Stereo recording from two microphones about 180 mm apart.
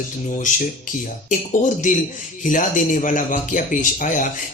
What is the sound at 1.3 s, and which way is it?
Speech, 45° left (ahead or behind).